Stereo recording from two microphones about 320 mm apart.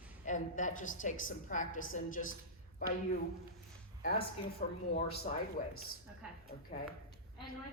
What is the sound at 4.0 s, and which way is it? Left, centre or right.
A woman's voice, left.